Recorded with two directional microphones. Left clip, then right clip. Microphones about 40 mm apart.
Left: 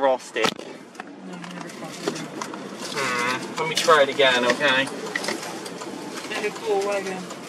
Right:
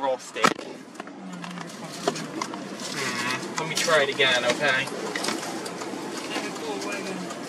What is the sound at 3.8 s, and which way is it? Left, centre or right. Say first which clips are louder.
Speech: left 4 dB; centre.